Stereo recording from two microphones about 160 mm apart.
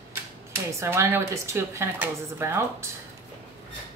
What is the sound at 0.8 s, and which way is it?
Speech, 15° right (ahead or behind).